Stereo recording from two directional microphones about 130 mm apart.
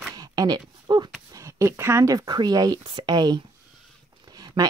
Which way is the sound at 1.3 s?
25° right (ahead or behind).